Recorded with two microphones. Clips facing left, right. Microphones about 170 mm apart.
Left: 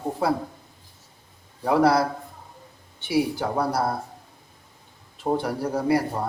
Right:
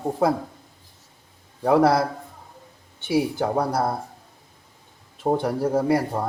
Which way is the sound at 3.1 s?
50° right (ahead or behind).